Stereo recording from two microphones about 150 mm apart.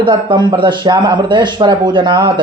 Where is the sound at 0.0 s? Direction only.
30° right (ahead or behind).